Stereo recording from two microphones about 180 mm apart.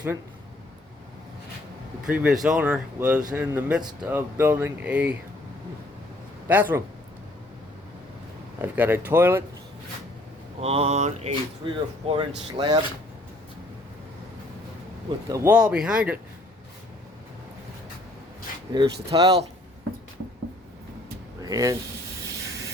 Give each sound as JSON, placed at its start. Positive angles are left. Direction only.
{"t": 2.0, "sound": "speech", "side_deg": -5}
{"t": 6.5, "sound": "speech", "side_deg": -10}
{"t": 8.6, "sound": "speech", "side_deg": -10}
{"t": 10.6, "sound": "mantra", "side_deg": -35}
{"t": 11.6, "sound": "speech", "side_deg": -25}
{"t": 15.3, "sound": "speech", "side_deg": -5}
{"t": 18.8, "sound": "speech", "side_deg": -20}
{"t": 21.4, "sound": "speech", "side_deg": -20}